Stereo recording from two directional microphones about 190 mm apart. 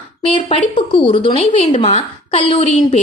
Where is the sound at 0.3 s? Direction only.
30° left (ahead or behind).